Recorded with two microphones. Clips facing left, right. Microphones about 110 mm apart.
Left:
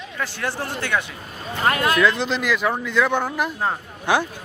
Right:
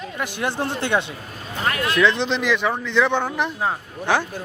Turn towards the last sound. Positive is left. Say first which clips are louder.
# even
turn(degrees=5)  # may be behind; listen again after turning